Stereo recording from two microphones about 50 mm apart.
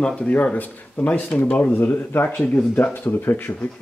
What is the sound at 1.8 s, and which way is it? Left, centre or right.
Speech, left.